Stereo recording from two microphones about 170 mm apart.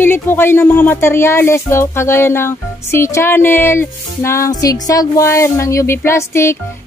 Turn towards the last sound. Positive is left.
turn(degrees=15)  # may be behind; listen again after turning